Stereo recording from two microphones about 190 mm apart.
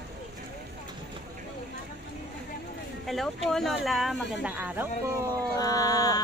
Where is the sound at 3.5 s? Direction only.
Centre (ahead or behind).